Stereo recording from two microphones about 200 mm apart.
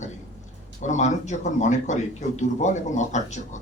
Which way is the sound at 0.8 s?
35° left (ahead or behind).